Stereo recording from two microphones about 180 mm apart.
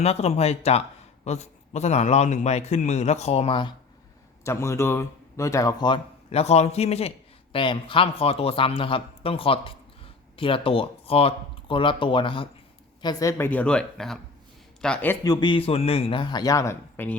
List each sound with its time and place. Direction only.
0.0 s a man's voice: 35° left (ahead or behind)
4.4 s a man's voice: 15° left (ahead or behind)